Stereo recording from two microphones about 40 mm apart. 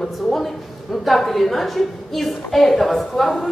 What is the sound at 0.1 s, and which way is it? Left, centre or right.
A woman's voice, centre.